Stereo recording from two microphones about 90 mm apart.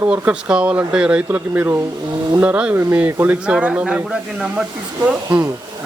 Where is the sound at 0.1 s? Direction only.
10° right (ahead or behind).